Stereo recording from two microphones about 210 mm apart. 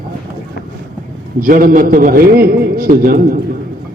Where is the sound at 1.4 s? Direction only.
40° right (ahead or behind).